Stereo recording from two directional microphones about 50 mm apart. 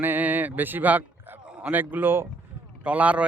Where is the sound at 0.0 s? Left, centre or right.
Right.